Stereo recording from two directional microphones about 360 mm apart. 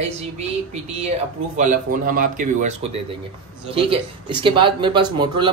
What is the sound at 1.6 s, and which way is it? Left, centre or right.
A man's voice, right.